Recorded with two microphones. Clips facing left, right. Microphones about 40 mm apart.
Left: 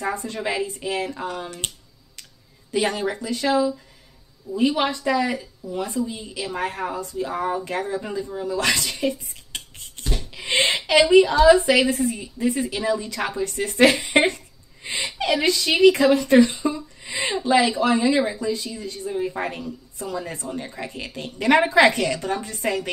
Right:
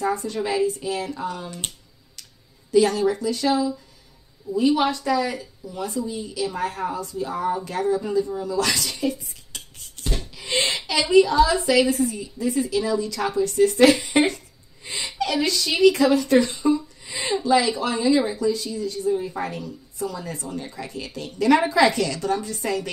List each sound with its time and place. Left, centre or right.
0.0 s speech: left
2.7 s speech: left
10.0 s a sound: left
10.7 s speech: left
14.8 s gasp: left
15.0 s speech: left
19.6 s speech: centre